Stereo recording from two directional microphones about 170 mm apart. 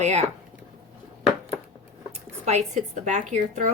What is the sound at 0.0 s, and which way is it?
Speech, 40° right (ahead or behind).